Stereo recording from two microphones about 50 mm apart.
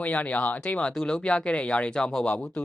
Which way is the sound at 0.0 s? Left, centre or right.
Left.